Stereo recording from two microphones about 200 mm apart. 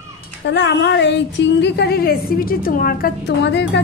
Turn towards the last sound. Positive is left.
turn(degrees=60)  # may be behind; listen again after turning